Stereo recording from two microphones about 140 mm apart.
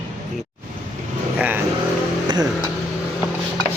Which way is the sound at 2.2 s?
30° right (ahead or behind).